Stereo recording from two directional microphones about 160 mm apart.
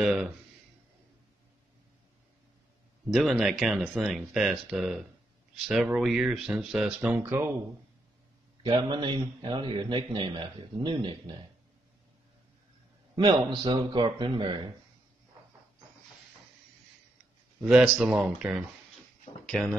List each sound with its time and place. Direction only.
0.0 s speech: 5° right (ahead or behind)
3.1 s speech: centre (ahead or behind)
8.6 s a man's voice: 30° right (ahead or behind)
13.1 s a man's voice: 25° right (ahead or behind)
17.6 s speech: 5° right (ahead or behind)